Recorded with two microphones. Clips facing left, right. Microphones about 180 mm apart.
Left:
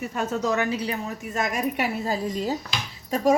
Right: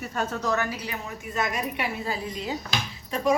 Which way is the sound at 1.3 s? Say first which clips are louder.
Left 3 dB; 45° left (ahead or behind).